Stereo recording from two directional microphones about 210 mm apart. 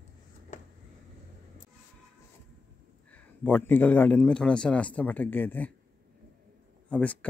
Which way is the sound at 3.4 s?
10° left (ahead or behind).